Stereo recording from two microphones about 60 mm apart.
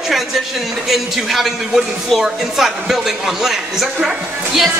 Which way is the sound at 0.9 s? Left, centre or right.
Centre.